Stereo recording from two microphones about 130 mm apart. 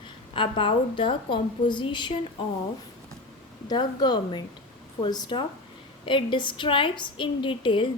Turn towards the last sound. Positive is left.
turn(degrees=40)  # may be behind; listen again after turning